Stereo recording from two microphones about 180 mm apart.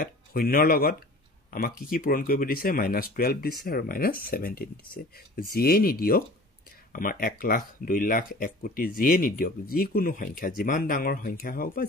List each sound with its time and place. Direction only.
0.0 s speech: 55° left (ahead or behind)